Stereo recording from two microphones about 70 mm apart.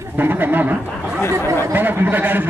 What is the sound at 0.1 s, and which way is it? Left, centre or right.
Speech, right.